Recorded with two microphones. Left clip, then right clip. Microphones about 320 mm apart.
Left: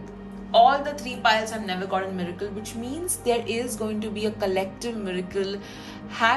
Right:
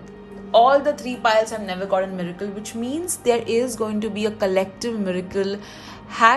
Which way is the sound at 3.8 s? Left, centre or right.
Right.